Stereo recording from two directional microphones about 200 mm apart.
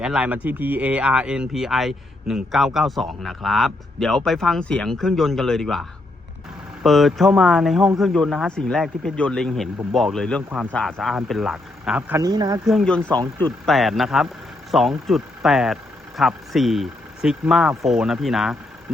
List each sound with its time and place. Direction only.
0.0 s speech: 5° right (ahead or behind)
6.8 s speech: centre (ahead or behind)
12.2 s speech: 20° right (ahead or behind)
12.6 s speech: centre (ahead or behind)